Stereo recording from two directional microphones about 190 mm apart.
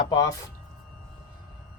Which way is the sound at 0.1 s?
20° left (ahead or behind).